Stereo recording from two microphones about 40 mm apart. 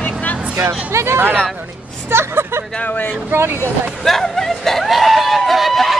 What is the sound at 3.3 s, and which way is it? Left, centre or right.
Speech, right.